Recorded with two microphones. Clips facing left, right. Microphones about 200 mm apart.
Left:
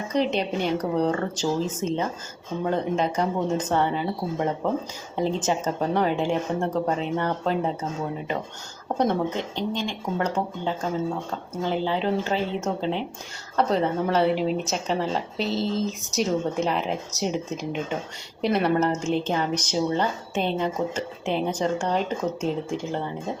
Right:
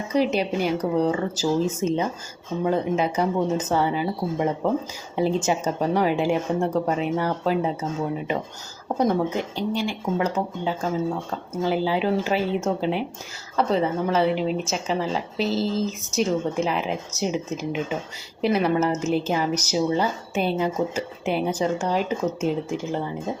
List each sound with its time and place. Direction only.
0.1 s speech: 5° right (ahead or behind)
9.0 s a woman's voice: 10° right (ahead or behind)